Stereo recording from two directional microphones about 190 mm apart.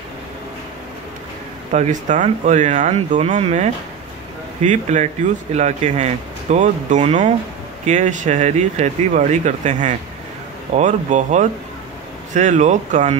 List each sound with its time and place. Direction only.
1.7 s speech: 40° right (ahead or behind)